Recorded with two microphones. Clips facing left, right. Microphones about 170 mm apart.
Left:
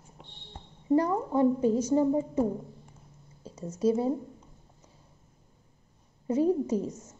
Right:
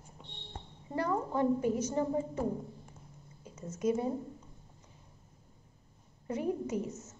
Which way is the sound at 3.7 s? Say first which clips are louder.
Left 5 dB; 30° left (ahead or behind).